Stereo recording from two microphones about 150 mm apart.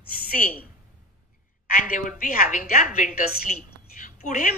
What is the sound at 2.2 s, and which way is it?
A woman's voice, 65° left (ahead or behind).